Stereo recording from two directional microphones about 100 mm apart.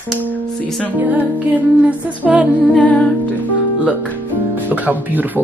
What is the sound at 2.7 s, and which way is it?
Humming, 15° left (ahead or behind).